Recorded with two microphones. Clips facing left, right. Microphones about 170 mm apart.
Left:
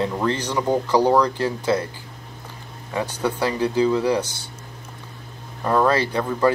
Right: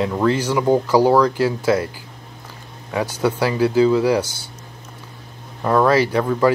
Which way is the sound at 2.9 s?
10° right (ahead or behind).